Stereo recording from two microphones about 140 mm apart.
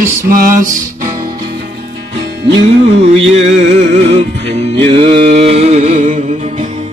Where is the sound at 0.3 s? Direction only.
85° right.